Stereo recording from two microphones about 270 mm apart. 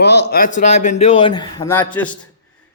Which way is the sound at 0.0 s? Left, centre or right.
Left.